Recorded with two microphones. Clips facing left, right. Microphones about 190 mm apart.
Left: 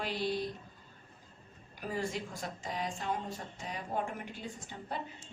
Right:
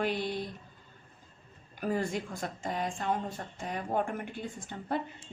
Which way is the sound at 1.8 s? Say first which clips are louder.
Right 5 dB; 55° right (ahead or behind).